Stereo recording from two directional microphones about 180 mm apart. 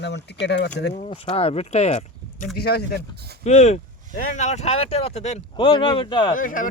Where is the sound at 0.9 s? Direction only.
30° left (ahead or behind).